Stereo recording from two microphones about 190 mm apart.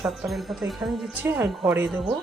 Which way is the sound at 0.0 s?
Centre (ahead or behind).